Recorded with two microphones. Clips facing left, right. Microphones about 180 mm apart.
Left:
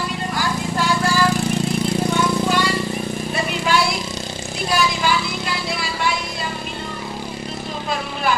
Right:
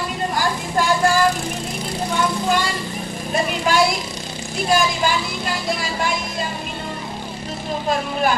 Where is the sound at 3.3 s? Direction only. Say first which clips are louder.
Right 2 dB; 45° right (ahead or behind).